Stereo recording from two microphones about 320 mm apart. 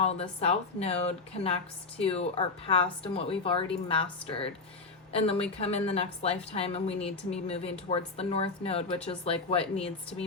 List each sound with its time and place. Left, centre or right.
0.0 s a woman's voice: centre